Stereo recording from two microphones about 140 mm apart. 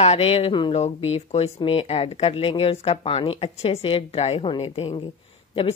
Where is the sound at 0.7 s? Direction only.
50° left (ahead or behind).